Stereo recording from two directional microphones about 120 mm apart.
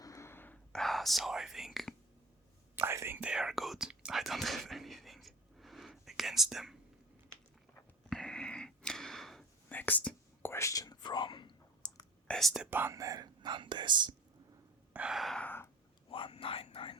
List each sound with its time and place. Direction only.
0.0 s whispering: 25° left (ahead or behind); by 2.0 s centre (ahead or behind)
2.7 s whispering: 20° right (ahead or behind); by 6.7 s centre (ahead or behind)
8.1 s a sound: 5° left (ahead or behind)
9.6 s whispering: 15° left (ahead or behind)
10.5 s whispering: 25° left (ahead or behind)
12.3 s gasp: centre (ahead or behind)
12.7 s speech: 20° right (ahead or behind); by 14.2 s 40° right (ahead or behind)
14.9 s gasp: 5° right (ahead or behind)
15.4 s a sound: 15° left (ahead or behind)
16.0 s whispering: 50° left (ahead or behind)